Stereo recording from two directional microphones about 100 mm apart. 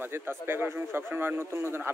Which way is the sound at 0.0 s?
20° right (ahead or behind).